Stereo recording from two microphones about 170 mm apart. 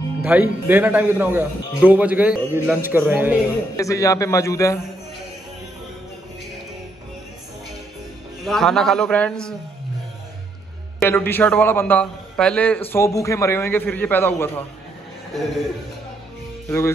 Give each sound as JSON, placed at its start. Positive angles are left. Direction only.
{"t": 0.2, "sound": "speech", "side_deg": -10}
{"t": 3.7, "sound": "a man's voice", "side_deg": 20}
{"t": 8.5, "sound": "a man's voice", "side_deg": 0}
{"t": 11.0, "sound": "a man's voice", "side_deg": 15}
{"t": 16.6, "sound": "speech", "side_deg": 15}